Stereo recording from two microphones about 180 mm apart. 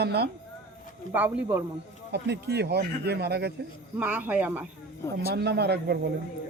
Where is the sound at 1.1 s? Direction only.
10° right (ahead or behind).